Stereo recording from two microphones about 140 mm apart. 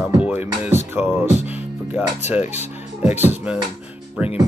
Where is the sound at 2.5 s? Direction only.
55° left (ahead or behind).